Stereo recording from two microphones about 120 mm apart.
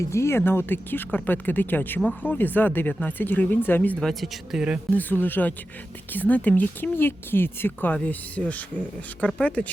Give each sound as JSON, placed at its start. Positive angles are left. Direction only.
{"t": 0.0, "sound": "speech", "side_deg": 25}
{"t": 4.0, "sound": "speech", "side_deg": 0}
{"t": 4.9, "sound": "speech", "side_deg": 15}